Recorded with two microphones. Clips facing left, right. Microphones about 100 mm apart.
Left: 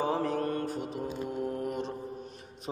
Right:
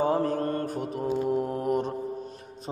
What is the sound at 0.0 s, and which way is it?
Mantra, 40° right (ahead or behind).